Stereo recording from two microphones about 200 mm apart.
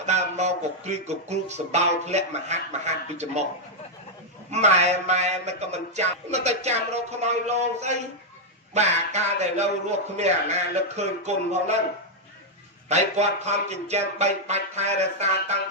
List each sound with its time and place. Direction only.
0.0 s speech: 35° right (ahead or behind)
4.5 s speech: 35° right (ahead or behind)
12.9 s speech: 35° right (ahead or behind)